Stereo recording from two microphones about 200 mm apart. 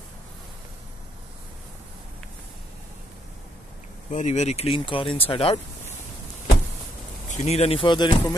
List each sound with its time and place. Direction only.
4.1 s speech: 35° left (ahead or behind)
7.2 s speech: 30° left (ahead or behind)